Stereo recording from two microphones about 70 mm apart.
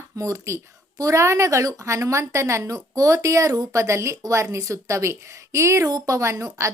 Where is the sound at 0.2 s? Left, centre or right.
Right.